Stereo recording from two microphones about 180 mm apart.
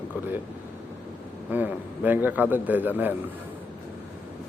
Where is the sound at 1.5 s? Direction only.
10° right (ahead or behind).